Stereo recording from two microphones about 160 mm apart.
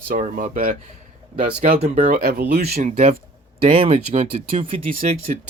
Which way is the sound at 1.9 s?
65° right (ahead or behind).